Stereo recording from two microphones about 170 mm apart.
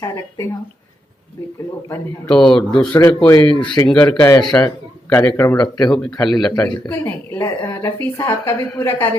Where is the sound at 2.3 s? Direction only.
5° left (ahead or behind).